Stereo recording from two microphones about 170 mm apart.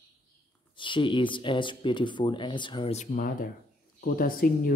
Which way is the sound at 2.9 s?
45° left (ahead or behind).